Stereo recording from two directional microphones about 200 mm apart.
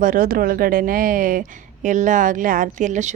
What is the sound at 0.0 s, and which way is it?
Speech, 45° right (ahead or behind).